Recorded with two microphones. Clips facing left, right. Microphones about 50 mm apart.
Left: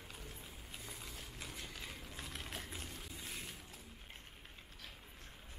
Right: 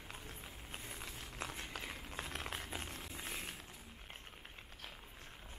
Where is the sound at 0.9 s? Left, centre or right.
Right.